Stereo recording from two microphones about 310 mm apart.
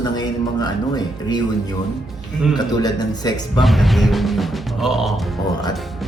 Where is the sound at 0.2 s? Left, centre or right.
Centre.